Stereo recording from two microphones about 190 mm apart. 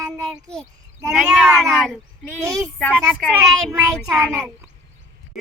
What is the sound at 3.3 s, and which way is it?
Child singing, 15° right (ahead or behind).